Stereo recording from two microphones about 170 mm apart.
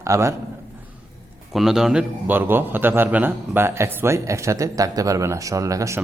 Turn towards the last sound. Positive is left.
turn(degrees=-20)  # may be behind; listen again after turning